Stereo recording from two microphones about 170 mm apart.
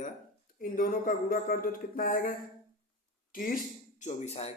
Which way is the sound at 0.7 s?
55° left (ahead or behind).